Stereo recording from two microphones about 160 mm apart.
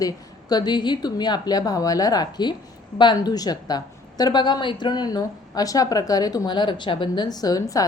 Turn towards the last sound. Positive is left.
turn(degrees=20)  # may be behind; listen again after turning